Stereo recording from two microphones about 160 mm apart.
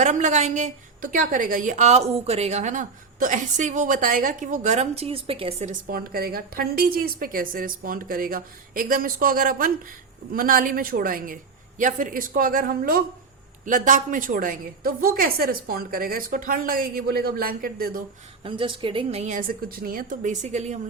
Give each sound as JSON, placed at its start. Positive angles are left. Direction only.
{"t": 0.0, "sound": "a woman's voice", "side_deg": -50}
{"t": 5.9, "sound": "a woman's voice", "side_deg": -65}
{"t": 18.4, "sound": "a woman's voice", "side_deg": -30}